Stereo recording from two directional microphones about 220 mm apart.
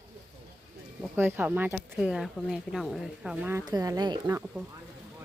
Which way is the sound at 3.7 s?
15° right (ahead or behind).